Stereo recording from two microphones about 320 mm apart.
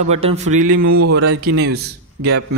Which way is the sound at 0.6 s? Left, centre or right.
Right.